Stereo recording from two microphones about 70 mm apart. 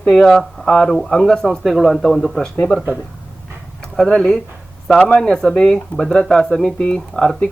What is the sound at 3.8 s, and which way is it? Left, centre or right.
Speech, centre.